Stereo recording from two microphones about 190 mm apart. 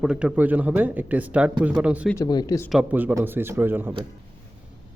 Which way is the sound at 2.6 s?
5° right (ahead or behind).